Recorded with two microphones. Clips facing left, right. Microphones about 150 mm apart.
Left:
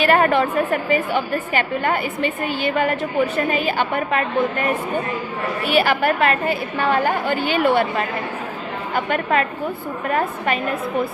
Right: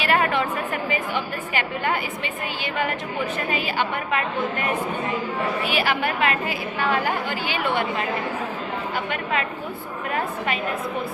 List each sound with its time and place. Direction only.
0.0 s a woman's voice: 50° left (ahead or behind)
9.0 s a woman's voice: 45° left (ahead or behind)